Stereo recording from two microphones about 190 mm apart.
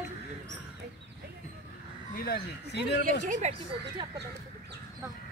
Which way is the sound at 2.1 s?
50° left (ahead or behind).